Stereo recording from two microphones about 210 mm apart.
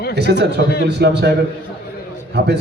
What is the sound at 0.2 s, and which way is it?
A man's voice, 55° right (ahead or behind).